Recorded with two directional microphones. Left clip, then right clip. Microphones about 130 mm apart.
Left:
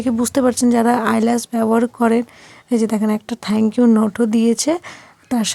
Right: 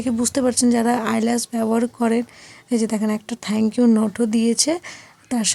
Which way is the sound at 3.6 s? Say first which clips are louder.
Left 3 dB; 20° left (ahead or behind).